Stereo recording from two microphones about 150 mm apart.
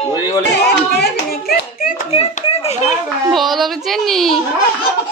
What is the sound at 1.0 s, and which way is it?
Hands, 90° left.